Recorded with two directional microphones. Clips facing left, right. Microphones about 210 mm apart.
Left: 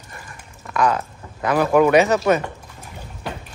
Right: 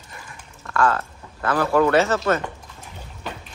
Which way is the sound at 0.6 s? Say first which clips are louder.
Left 1 dB; 15° left (ahead or behind).